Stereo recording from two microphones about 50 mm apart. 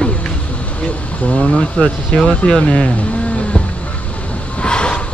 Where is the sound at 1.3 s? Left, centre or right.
Left.